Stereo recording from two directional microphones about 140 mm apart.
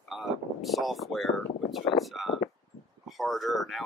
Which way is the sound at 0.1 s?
Centre (ahead or behind).